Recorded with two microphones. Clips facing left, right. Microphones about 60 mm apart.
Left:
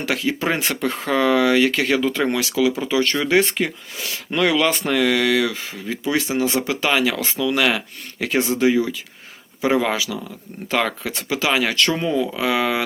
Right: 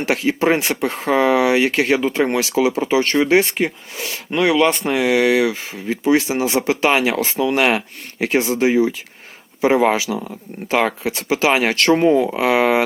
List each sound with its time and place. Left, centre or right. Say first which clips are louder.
0.0 s speech: right 4 dB; right
4.3 s speech: right 3 dB; centre
4.9 s speech: right 3 dB; right